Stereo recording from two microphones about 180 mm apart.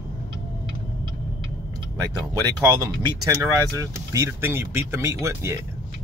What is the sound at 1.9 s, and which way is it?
Speech, 20° right (ahead or behind).